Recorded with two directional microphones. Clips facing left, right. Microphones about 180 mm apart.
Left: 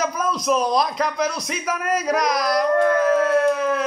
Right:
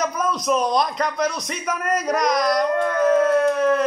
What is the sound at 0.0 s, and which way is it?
A man's voice, centre (ahead or behind).